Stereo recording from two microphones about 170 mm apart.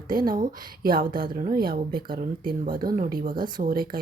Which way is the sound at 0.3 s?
60° right (ahead or behind).